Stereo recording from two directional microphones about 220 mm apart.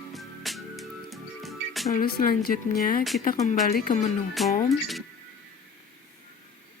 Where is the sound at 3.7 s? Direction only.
40° left (ahead or behind).